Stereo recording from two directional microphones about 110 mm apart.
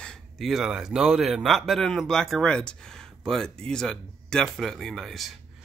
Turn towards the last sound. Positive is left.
turn(degrees=0)  # may be behind; listen again after turning